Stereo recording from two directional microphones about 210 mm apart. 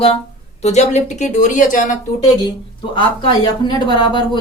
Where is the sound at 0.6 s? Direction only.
30° left (ahead or behind).